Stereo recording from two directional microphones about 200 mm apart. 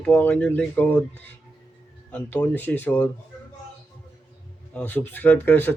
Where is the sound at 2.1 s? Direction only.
10° left (ahead or behind).